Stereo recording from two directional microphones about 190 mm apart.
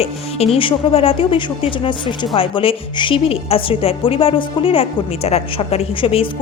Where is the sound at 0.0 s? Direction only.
35° left (ahead or behind).